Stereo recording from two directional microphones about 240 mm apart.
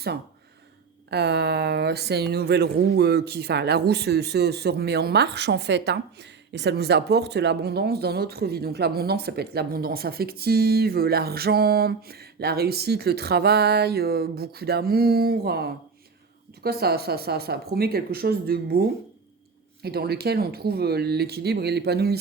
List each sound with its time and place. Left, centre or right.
1.1 s speech: right
16.6 s speech: right
19.8 s speech: right